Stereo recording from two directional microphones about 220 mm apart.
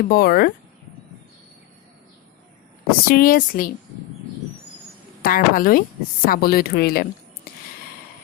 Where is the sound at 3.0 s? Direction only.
40° left (ahead or behind).